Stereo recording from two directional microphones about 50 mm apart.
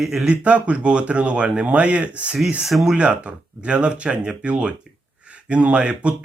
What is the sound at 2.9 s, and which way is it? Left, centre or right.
A man's voice, right.